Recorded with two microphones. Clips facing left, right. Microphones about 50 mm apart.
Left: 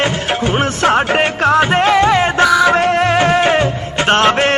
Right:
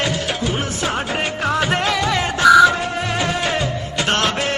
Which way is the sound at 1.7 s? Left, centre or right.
Left.